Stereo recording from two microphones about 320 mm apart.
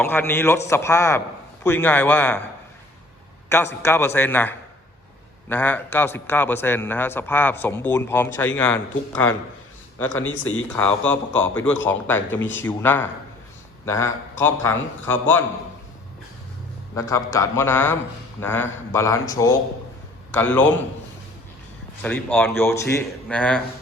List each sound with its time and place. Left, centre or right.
0.0 s a man's voice: centre
3.8 s a man's voice: centre
10.2 s speech: left
10.7 s a man's voice: centre
16.9 s a man's voice: centre
22.0 s a man's voice: centre